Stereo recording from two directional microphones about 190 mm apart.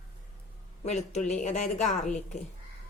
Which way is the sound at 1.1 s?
40° left (ahead or behind).